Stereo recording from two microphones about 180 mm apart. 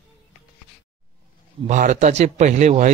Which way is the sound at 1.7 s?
45° right (ahead or behind).